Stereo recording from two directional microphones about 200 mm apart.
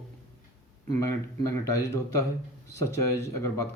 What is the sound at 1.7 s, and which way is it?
Speech, 15° left (ahead or behind).